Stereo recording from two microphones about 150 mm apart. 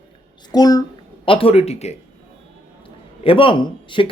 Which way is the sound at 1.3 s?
40° left (ahead or behind).